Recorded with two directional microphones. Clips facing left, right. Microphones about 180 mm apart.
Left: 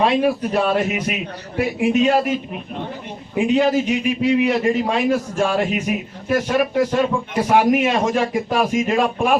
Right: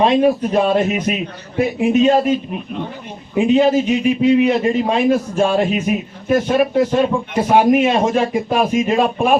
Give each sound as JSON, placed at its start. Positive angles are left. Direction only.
{"t": 0.0, "sound": "a man's voice", "side_deg": -20}
{"t": 3.3, "sound": "a man's voice", "side_deg": -20}